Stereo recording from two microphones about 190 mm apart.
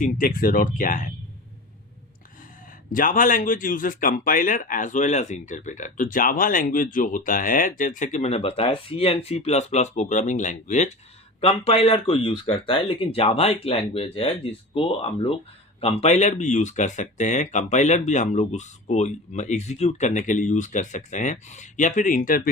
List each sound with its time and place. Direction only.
0.0 s speech: 50° left (ahead or behind)
2.9 s speech: 45° left (ahead or behind)